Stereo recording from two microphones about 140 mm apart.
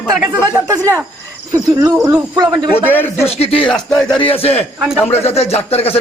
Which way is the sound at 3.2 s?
45° left (ahead or behind).